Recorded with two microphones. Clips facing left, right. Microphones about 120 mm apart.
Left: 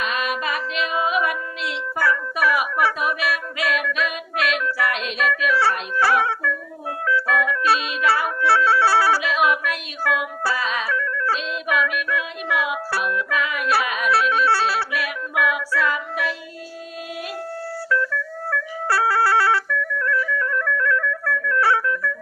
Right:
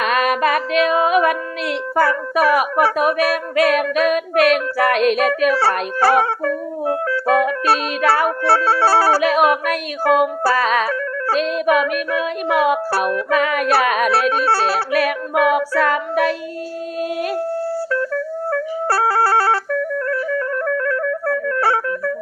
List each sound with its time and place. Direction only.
0.0 s music: 55° right (ahead or behind)
5.4 s speech: 45° right (ahead or behind)
9.2 s music: 50° right (ahead or behind)
17.9 s music: 35° right (ahead or behind)